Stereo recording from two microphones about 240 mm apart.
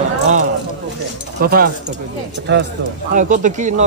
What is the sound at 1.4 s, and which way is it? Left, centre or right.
Speech, right.